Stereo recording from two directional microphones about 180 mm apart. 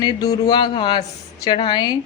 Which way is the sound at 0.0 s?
25° left (ahead or behind).